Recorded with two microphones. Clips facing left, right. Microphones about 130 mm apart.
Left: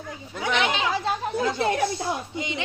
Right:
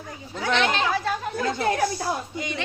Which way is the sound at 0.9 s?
20° left (ahead or behind).